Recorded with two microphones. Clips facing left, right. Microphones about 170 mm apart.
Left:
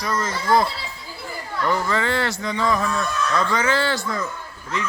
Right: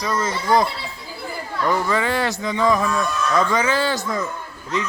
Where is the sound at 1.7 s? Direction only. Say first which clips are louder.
Right 1 dB; 15° right (ahead or behind).